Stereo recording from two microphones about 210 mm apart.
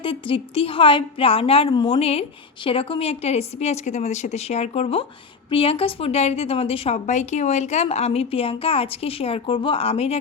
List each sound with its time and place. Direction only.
0.0 s a woman's voice: 25° left (ahead or behind)